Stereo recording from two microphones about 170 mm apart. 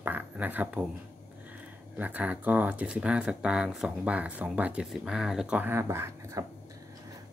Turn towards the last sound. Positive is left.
turn(degrees=-15)  # may be behind; listen again after turning